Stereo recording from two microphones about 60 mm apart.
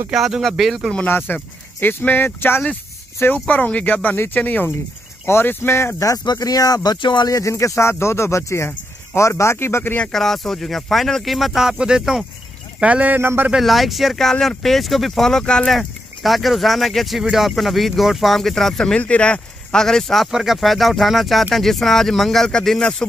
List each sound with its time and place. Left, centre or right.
0.1 s speech: centre
1.0 s speech: left
3.4 s speech: left
5.9 s speech: left
7.2 s speech: left
7.5 s speech: left
10.1 s speech: centre
12.8 s speech: right
13.2 s a man's voice: right
13.6 s speech: centre
15.7 s speech: centre
18.9 s speech: left
20.2 s speech: centre